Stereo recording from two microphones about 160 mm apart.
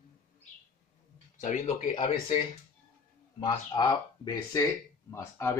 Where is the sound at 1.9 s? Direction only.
30° left (ahead or behind).